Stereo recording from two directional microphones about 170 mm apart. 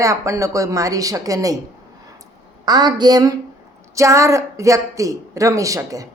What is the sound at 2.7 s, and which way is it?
Speech, 25° right (ahead or behind).